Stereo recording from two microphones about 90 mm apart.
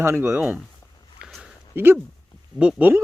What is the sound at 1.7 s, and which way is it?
Speech, 25° right (ahead or behind).